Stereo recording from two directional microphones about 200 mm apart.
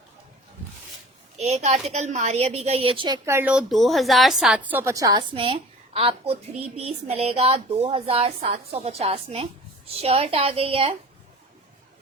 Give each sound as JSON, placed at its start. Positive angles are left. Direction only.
{"t": 1.4, "sound": "a woman's voice", "side_deg": -35}
{"t": 3.2, "sound": "a woman's voice", "side_deg": -10}